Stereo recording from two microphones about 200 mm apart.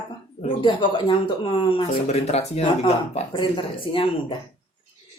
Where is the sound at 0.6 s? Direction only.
25° left (ahead or behind).